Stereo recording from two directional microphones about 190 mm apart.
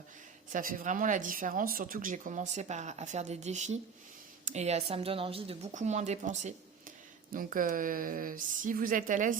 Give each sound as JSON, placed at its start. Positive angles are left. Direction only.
{"t": 0.5, "sound": "speech", "side_deg": -45}